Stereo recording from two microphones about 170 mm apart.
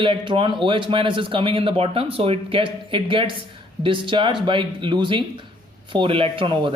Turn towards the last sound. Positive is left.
turn(degrees=-30)  # may be behind; listen again after turning